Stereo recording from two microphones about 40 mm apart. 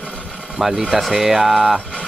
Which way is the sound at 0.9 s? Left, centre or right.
Centre.